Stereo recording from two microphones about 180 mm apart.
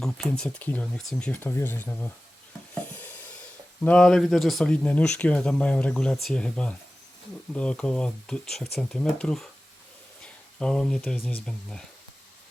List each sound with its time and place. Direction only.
0.0 s speech: 5° left (ahead or behind)
2.7 s stir: 10° left (ahead or behind)
3.8 s speech: 5° left (ahead or behind)
10.6 s speech: 5° left (ahead or behind)